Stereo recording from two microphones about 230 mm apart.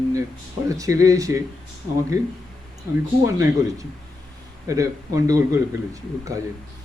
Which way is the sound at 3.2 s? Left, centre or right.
Centre.